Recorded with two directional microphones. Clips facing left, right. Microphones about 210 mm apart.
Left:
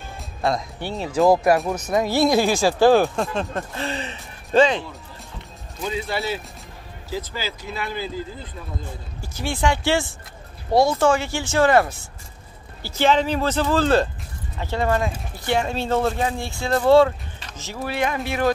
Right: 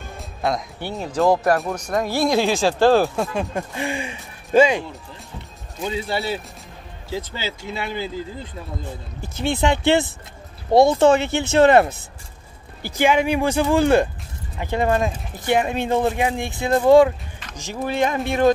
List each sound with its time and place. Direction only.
0.4 s speech: centre (ahead or behind)
3.5 s speech: 15° right (ahead or behind)
5.9 s speech: 30° right (ahead or behind)
9.6 s speech: 20° right (ahead or behind)